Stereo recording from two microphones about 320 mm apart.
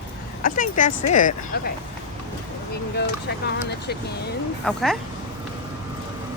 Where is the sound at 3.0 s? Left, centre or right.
Left.